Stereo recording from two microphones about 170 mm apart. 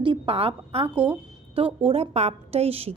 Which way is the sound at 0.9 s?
10° right (ahead or behind).